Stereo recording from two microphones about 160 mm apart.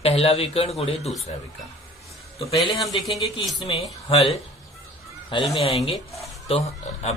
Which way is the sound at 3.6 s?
40° left (ahead or behind).